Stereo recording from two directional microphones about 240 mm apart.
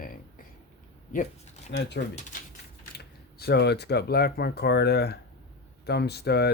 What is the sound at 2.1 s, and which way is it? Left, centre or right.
Speech, left.